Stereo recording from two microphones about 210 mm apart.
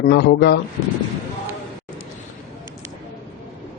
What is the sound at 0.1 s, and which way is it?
Speech, 55° left (ahead or behind).